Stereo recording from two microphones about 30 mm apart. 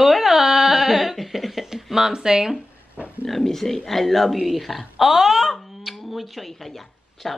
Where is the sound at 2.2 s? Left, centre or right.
Right.